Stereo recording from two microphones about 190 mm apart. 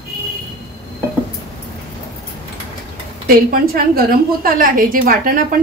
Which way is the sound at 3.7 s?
50° right (ahead or behind).